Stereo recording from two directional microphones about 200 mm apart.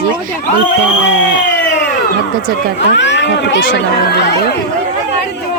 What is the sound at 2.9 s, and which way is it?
Speech, 60° left (ahead or behind).